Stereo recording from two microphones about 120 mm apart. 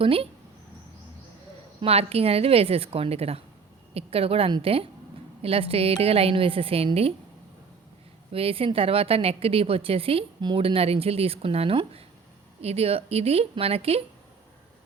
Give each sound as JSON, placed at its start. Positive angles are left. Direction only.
{"t": 0.0, "sound": "a woman's voice", "side_deg": -50}
{"t": 1.8, "sound": "a woman's voice", "side_deg": -55}
{"t": 8.3, "sound": "a woman's voice", "side_deg": -50}